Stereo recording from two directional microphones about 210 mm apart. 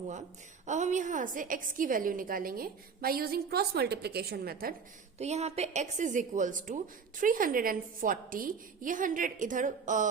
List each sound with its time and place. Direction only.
0.6 s a woman's voice: 35° right (ahead or behind)
5.1 s a woman's voice: 30° right (ahead or behind)